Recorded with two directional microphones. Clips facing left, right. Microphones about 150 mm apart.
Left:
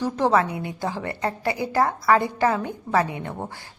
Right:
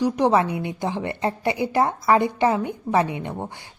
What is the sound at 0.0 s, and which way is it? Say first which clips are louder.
A woman's voice: right 2 dB; 20° right (ahead or behind).